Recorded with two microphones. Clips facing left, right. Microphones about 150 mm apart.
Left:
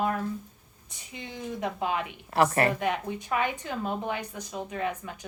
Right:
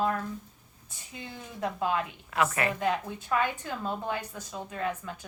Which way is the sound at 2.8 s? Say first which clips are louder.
Even; 15° left (ahead or behind).